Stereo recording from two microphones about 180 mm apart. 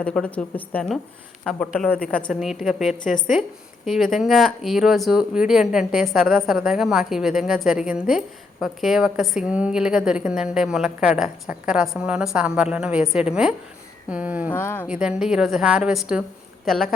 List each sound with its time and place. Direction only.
0.0 s a woman's voice: 5° left (ahead or behind)
2.0 s a woman's voice: 5° left (ahead or behind)
14.5 s a woman's voice: 10° left (ahead or behind)
15.0 s a woman's voice: 5° right (ahead or behind)